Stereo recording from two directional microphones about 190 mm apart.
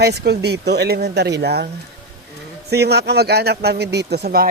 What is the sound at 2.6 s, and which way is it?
Speech, 60° right (ahead or behind).